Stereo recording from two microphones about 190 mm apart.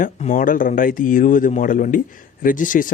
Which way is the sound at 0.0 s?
45° left (ahead or behind).